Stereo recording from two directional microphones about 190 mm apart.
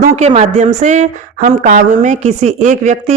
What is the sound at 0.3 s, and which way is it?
A woman's voice, 35° right (ahead or behind).